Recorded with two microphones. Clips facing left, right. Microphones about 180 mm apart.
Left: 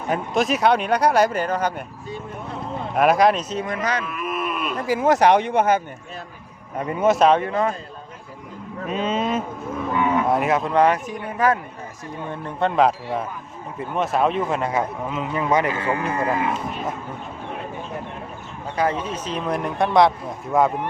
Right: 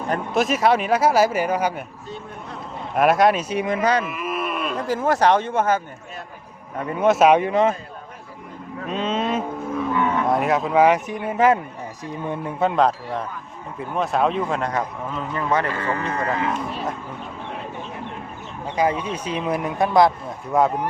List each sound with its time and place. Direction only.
0.1 s speech: centre (ahead or behind)
2.9 s speech: centre (ahead or behind)
3.5 s speech: 15° right (ahead or behind)
4.0 s a sound: 5° right (ahead or behind)
4.9 s speech: 15° left (ahead or behind)
7.0 s speech: centre (ahead or behind)
7.3 s speech: 15° right (ahead or behind)
8.9 s speech: 5° left (ahead or behind)
10.9 s speech: 20° right (ahead or behind)
12.3 s speech: 5° right (ahead or behind)
18.8 s speech: 10° right (ahead or behind)